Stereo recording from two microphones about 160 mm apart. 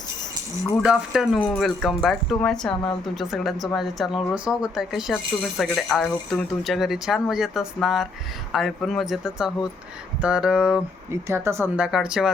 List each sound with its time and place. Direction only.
0.8 s speech: 5° right (ahead or behind)
11.1 s speech: 15° right (ahead or behind)
11.9 s speech: 5° right (ahead or behind)